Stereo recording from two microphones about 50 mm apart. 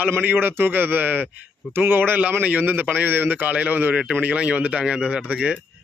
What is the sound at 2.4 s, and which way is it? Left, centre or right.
A man's voice, right.